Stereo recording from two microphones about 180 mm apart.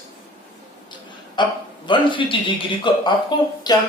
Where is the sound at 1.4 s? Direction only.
25° left (ahead or behind).